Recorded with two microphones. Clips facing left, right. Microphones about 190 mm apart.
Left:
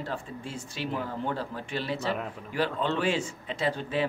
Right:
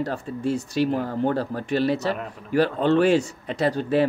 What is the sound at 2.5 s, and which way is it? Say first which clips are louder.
Speech: right 9 dB; 50° right (ahead or behind).